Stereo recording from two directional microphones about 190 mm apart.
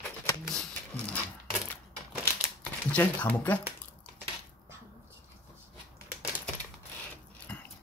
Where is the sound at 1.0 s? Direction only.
5° left (ahead or behind).